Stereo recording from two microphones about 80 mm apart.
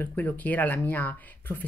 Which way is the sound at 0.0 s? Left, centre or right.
Left.